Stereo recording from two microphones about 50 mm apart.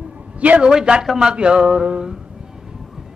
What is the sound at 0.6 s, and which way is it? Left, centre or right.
A man's voice, centre.